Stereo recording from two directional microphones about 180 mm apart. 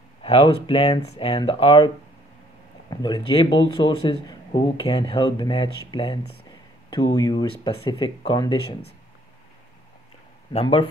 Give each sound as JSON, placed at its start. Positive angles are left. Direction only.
{"t": 0.2, "sound": "speech", "side_deg": 30}
{"t": 2.9, "sound": "speech", "side_deg": 20}
{"t": 10.5, "sound": "speech", "side_deg": 30}